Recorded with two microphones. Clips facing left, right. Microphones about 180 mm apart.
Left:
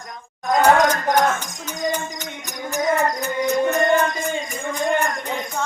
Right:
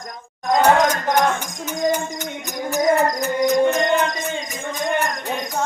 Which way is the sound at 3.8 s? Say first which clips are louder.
Left 1 dB; 15° right (ahead or behind).